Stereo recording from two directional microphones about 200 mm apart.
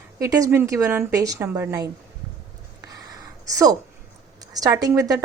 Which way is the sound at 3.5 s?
20° right (ahead or behind).